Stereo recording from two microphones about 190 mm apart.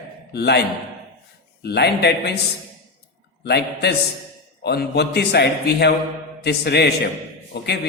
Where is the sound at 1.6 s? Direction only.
60° left (ahead or behind).